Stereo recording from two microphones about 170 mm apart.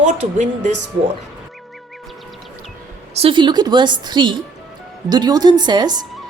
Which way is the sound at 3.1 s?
30° right (ahead or behind).